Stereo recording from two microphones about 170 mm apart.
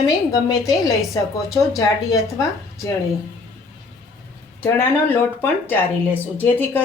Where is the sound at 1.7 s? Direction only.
20° left (ahead or behind).